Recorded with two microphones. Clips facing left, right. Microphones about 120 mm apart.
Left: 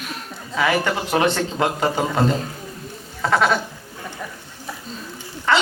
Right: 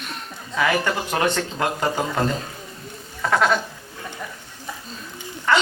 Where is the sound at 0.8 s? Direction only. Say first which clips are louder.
Left 3 dB; 20° left (ahead or behind).